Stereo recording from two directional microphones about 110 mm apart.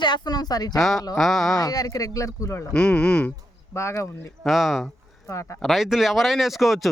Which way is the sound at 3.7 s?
25° left (ahead or behind).